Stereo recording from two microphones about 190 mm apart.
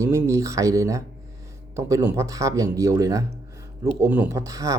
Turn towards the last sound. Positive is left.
turn(degrees=-15)  # may be behind; listen again after turning